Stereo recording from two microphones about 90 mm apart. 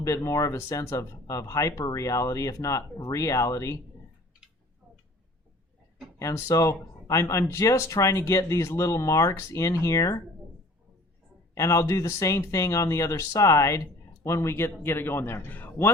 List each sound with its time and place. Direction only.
0.0 s speech: 40° left (ahead or behind)
6.1 s speech: 35° left (ahead or behind)
11.5 s a man's voice: 35° left (ahead or behind)